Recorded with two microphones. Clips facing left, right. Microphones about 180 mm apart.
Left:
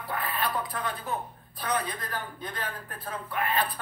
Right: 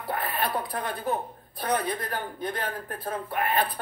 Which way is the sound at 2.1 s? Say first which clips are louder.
Right 5 dB; 50° right (ahead or behind).